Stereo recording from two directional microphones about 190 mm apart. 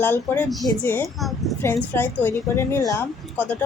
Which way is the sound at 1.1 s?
Centre (ahead or behind).